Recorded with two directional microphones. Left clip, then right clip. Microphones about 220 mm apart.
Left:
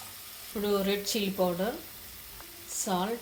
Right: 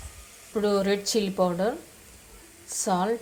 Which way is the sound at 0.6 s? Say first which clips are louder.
Right 5 dB; 35° right (ahead or behind).